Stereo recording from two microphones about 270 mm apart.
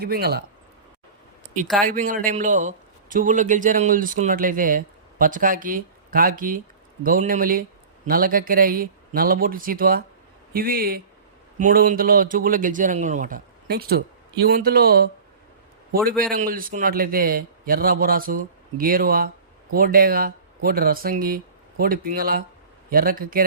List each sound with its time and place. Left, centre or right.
0.0 s a man's voice: right
1.8 s a man's voice: right
16.3 s a man's voice: right